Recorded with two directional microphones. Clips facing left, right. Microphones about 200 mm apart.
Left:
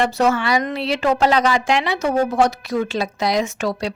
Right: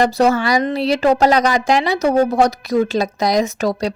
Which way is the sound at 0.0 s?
35° right (ahead or behind).